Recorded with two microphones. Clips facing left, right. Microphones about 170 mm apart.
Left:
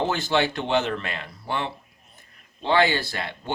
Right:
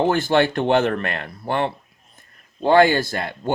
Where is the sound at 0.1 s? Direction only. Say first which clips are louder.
Right 6 dB; 50° right (ahead or behind).